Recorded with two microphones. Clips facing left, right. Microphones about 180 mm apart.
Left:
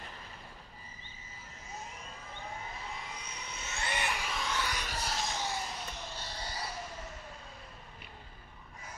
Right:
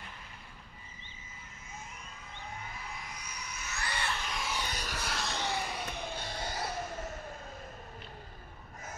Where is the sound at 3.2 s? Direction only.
25° left (ahead or behind).